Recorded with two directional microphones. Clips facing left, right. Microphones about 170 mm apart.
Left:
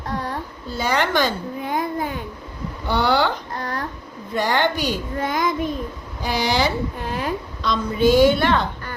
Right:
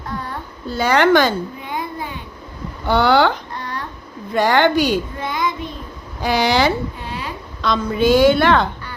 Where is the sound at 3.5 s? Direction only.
40° left (ahead or behind).